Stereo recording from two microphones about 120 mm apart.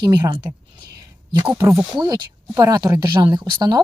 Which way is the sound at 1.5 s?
25° right (ahead or behind).